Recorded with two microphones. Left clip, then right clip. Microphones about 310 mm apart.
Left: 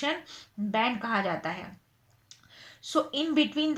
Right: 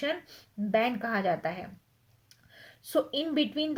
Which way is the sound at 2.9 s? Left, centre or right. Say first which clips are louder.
Left 1 dB; right.